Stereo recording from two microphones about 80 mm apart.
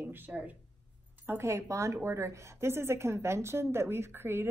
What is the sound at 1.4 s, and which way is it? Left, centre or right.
A woman's voice, right.